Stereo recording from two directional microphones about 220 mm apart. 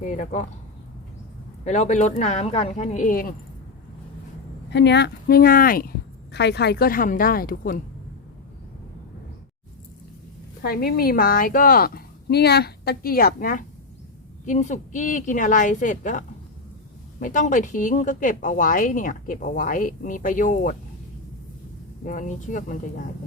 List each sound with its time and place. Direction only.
0.0 s speech: 35° left (ahead or behind)
1.6 s speech: 30° left (ahead or behind)
4.7 s speech: 50° left (ahead or behind)
10.6 s speech: 45° left (ahead or behind)
22.0 s speech: 35° left (ahead or behind)